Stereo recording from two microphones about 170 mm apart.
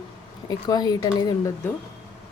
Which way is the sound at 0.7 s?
25° left (ahead or behind).